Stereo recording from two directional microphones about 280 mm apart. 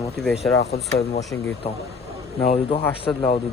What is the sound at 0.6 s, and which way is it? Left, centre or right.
Speech, left.